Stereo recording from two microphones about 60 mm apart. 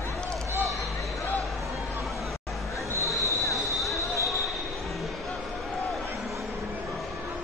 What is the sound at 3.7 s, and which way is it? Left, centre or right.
Basketball bounce, centre.